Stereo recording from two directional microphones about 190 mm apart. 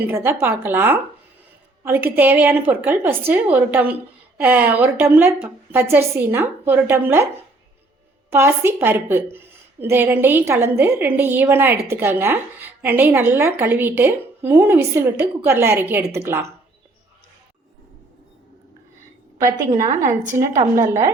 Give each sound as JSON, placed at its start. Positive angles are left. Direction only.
{"t": 0.1, "sound": "a woman's voice", "side_deg": -10}
{"t": 8.3, "sound": "a woman's voice", "side_deg": -10}
{"t": 19.4, "sound": "a woman's voice", "side_deg": -15}